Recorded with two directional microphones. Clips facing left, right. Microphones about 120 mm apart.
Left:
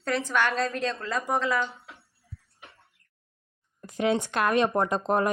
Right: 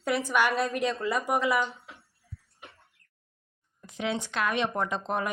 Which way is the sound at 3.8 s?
50° left (ahead or behind).